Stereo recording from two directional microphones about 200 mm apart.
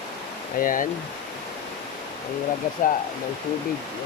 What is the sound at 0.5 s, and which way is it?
Speech, 45° left (ahead or behind).